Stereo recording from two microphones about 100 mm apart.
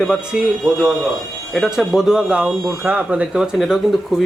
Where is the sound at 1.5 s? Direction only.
5° right (ahead or behind).